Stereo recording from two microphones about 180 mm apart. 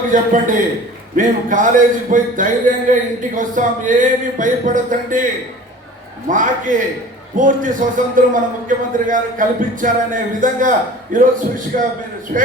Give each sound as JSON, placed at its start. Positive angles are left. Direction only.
{"t": 0.1, "sound": "a man's voice", "side_deg": -45}